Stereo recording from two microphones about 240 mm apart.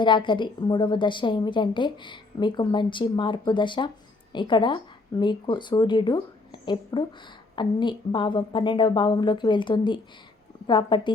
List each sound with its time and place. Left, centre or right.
0.0 s a woman's voice: centre